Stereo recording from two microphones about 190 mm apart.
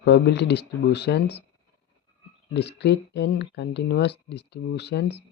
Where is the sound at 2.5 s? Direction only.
65° left (ahead or behind).